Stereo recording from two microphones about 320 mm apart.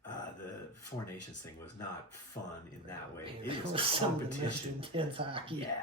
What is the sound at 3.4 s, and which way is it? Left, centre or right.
Speech, centre.